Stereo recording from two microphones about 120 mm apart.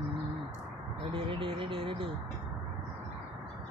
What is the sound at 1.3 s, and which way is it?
Speech, 45° right (ahead or behind).